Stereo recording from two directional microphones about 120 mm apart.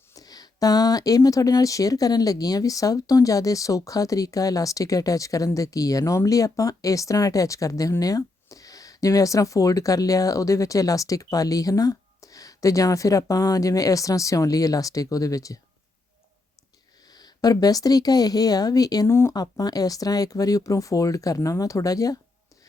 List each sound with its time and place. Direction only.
0.1 s speech: 30° left (ahead or behind)
17.1 s a woman's voice: 35° left (ahead or behind)
19.4 s speech: 30° left (ahead or behind)